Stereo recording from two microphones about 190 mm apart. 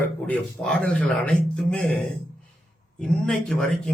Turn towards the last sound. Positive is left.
turn(degrees=5)  # may be behind; listen again after turning